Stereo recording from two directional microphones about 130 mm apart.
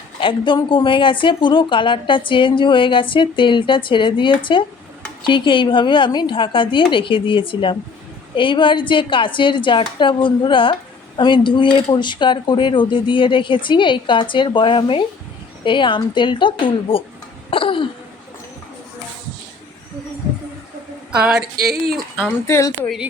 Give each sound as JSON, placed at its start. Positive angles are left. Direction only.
{"t": 0.2, "sound": "a woman's voice", "side_deg": 40}
{"t": 17.5, "sound": "cough", "side_deg": 45}
{"t": 21.2, "sound": "a sound", "side_deg": -5}
{"t": 22.4, "sound": "a woman's voice", "side_deg": 20}